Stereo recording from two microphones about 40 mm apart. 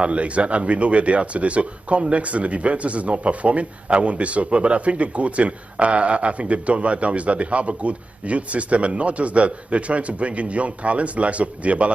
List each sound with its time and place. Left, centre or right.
0.0 s speech: right